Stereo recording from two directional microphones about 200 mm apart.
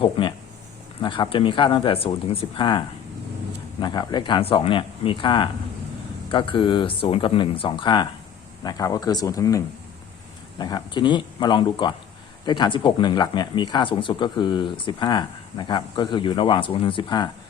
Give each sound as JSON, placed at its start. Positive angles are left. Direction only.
{"t": 0.0, "sound": "speech", "side_deg": 25}